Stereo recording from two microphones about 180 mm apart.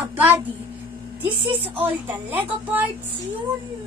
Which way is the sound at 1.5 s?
30° right (ahead or behind).